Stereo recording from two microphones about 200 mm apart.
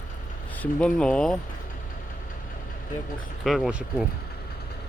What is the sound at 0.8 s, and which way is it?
Speech, 5° left (ahead or behind).